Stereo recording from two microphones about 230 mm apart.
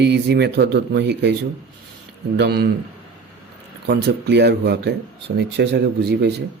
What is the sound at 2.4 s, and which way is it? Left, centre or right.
Speech, right.